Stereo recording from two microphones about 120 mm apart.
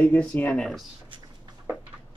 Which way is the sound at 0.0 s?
15° left (ahead or behind).